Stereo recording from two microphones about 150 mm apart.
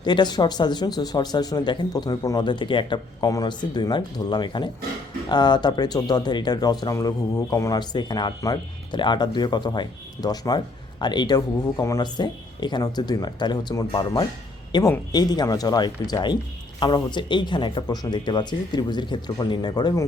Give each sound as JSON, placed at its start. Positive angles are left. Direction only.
{"t": 0.0, "sound": "speech", "side_deg": 30}